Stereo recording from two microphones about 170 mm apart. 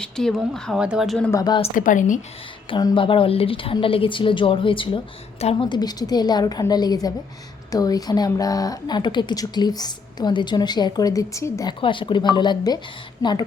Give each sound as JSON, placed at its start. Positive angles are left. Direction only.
{"t": 0.0, "sound": "speech", "side_deg": 5}
{"t": 1.3, "sound": "speech", "side_deg": 20}
{"t": 1.7, "sound": "speech", "side_deg": 50}
{"t": 2.6, "sound": "a woman's voice", "side_deg": 30}
{"t": 11.8, "sound": "speech", "side_deg": 30}